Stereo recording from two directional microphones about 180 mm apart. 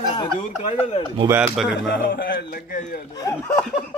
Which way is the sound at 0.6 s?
35° left (ahead or behind).